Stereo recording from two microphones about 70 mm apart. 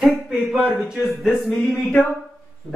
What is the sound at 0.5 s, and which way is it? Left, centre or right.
Speech, centre.